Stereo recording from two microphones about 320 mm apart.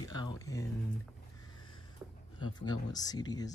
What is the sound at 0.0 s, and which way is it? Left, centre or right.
Speech, centre.